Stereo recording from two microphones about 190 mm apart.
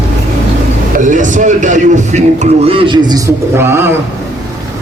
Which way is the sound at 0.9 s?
40° right (ahead or behind).